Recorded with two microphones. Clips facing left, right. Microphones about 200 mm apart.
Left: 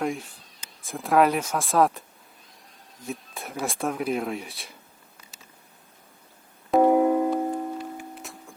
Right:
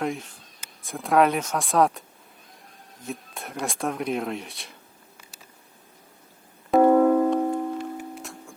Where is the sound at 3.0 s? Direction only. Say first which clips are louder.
Even; centre (ahead or behind).